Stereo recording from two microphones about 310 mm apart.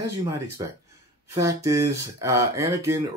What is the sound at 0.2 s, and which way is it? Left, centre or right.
Speech, centre.